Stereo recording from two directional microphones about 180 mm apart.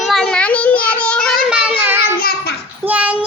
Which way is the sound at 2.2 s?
55° left (ahead or behind).